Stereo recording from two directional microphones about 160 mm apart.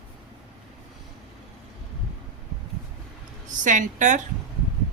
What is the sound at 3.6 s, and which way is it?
Speech, 55° right (ahead or behind).